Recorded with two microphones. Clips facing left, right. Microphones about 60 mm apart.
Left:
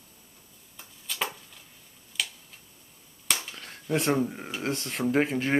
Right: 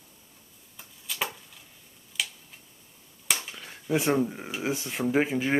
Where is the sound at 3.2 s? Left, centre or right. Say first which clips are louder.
Even; centre.